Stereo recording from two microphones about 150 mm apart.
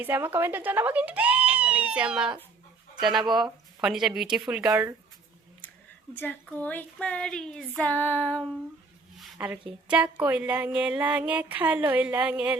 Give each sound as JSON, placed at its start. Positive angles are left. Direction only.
{"t": 0.0, "sound": "a woman's voice", "side_deg": -15}
{"t": 4.7, "sound": "speech", "side_deg": -20}
{"t": 6.6, "sound": "a sound", "side_deg": 10}
{"t": 9.1, "sound": "a woman's voice", "side_deg": -10}